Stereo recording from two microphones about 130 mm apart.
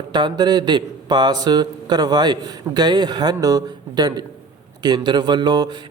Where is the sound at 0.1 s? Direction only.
35° right (ahead or behind).